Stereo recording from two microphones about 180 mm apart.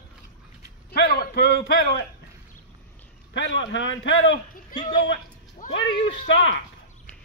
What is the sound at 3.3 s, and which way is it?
A man's voice, 90° left.